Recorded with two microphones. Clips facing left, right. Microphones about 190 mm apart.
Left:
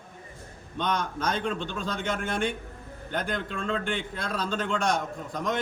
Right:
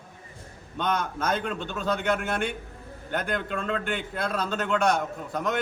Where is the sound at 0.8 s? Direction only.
5° right (ahead or behind).